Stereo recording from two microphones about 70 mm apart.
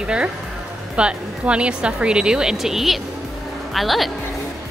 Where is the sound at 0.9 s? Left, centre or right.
Centre.